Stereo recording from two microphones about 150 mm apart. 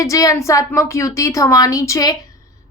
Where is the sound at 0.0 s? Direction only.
20° left (ahead or behind).